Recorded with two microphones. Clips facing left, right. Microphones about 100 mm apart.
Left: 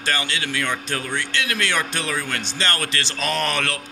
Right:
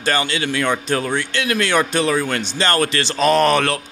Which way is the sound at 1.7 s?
40° right (ahead or behind).